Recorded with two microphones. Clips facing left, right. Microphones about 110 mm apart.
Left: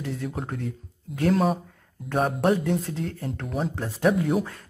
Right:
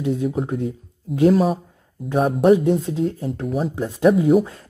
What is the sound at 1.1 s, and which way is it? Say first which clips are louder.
Speech: right 8 dB; 15° right (ahead or behind).